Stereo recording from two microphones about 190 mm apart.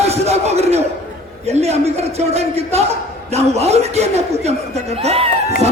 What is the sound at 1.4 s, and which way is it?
Speech, 35° right (ahead or behind).